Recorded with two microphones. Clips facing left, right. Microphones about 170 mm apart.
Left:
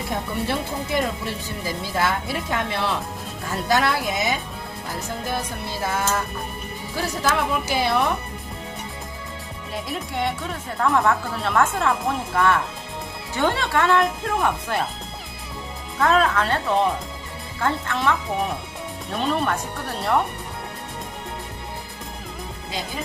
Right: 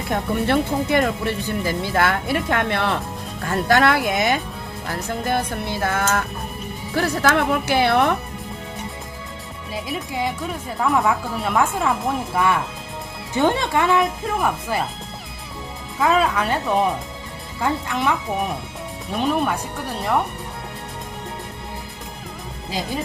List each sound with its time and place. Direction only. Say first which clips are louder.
0.4 s speech: right 6 dB; 60° right (ahead or behind)
9.7 s speech: right 1 dB; 5° right (ahead or behind)
16.0 s speech: right 1 dB; 5° right (ahead or behind)
19.1 s speech: right 2 dB; 5° right (ahead or behind)